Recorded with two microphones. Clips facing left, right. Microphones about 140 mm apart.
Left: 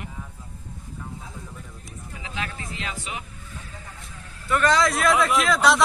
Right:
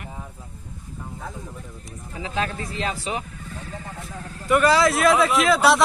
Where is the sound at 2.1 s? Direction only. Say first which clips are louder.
Right 7 dB; 35° right (ahead or behind).